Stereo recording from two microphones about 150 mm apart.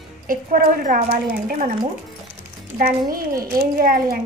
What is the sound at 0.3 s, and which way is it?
Speech, 70° right (ahead or behind).